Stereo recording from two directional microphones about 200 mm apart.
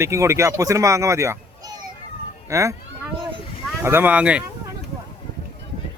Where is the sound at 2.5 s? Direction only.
15° right (ahead or behind).